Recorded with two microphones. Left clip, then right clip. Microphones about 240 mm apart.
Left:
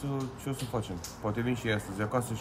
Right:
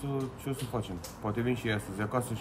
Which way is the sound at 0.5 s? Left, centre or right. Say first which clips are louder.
Left 1 dB; centre.